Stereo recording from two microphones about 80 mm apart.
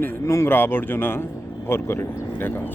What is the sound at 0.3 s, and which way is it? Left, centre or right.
Speech, left.